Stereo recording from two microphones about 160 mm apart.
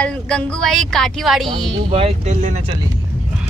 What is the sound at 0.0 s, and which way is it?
A woman's voice, 5° left (ahead or behind).